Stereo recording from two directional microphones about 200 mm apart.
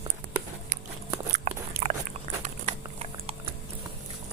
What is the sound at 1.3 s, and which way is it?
Biting, 35° right (ahead or behind).